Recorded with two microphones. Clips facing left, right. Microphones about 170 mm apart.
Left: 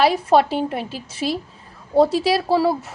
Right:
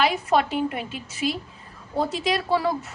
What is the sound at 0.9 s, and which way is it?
Speech, 35° left (ahead or behind).